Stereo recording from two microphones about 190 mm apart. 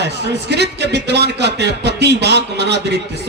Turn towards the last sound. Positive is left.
turn(degrees=-60)  # may be behind; listen again after turning